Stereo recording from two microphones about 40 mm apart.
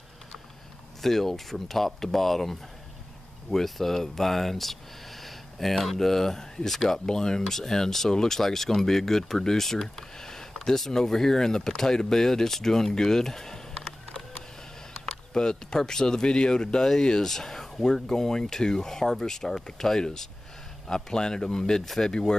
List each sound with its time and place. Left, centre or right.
1.0 s speech: centre
21.8 s speech: centre